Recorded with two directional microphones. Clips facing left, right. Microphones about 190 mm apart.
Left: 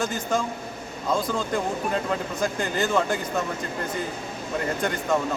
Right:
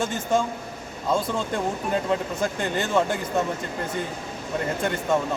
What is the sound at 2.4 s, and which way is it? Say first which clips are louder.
Speech: even; 25° right (ahead or behind).